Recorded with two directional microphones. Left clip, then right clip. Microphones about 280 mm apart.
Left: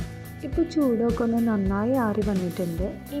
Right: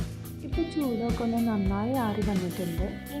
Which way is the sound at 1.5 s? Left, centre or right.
Centre.